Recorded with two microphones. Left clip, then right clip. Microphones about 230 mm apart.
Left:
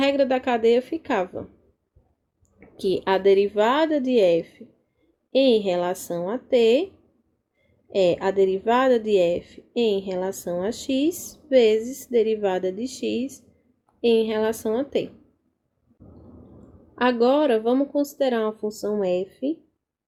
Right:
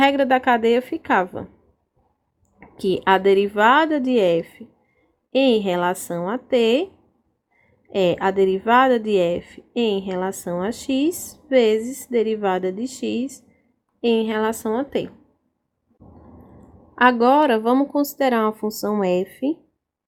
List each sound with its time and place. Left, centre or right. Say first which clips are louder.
0.0 s a woman's voice: right 4 dB; right
2.6 s a woman's voice: right 2 dB; centre
7.9 s a woman's voice: right 1 dB; right
16.9 s a woman's voice: right 5 dB; right